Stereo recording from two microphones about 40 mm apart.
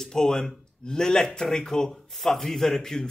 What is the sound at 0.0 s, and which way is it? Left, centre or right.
A man's voice, centre.